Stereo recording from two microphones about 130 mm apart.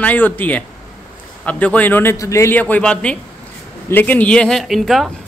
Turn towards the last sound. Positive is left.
turn(degrees=0)  # may be behind; listen again after turning